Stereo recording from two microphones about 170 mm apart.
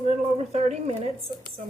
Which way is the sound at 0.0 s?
40° right (ahead or behind).